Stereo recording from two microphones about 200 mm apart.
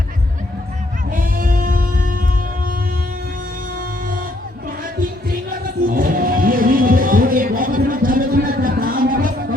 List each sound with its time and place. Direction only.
1.1 s music: 45° right (ahead or behind)
5.5 s music: 45° right (ahead or behind)